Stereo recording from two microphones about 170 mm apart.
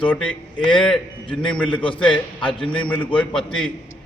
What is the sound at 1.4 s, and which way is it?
A man's voice, 5° left (ahead or behind).